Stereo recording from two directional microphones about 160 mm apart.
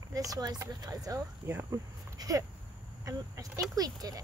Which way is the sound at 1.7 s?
20° right (ahead or behind).